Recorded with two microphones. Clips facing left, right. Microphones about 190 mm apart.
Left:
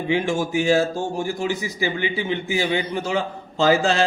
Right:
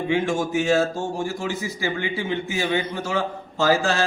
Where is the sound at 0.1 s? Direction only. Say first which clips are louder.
Left 1 dB; 15° left (ahead or behind).